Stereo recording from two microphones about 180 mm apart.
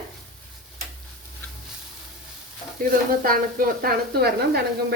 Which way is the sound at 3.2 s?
55° right (ahead or behind).